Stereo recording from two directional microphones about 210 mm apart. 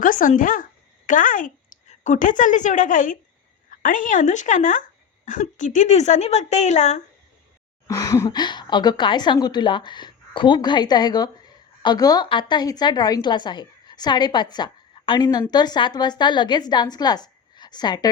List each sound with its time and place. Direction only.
0.0 s speech: 40° left (ahead or behind)
7.9 s a woman's voice: 15° left (ahead or behind)